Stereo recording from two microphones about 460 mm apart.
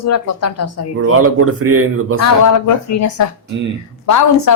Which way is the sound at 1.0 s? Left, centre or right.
Right.